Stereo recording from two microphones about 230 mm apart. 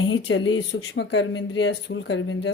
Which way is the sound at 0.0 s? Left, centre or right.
Left.